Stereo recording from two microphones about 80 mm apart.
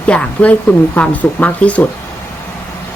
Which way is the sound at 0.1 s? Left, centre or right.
Centre.